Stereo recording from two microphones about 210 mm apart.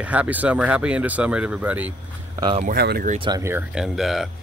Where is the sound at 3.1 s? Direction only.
20° right (ahead or behind); by 4.3 s centre (ahead or behind).